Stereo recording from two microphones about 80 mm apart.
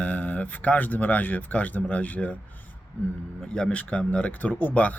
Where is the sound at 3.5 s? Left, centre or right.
Centre.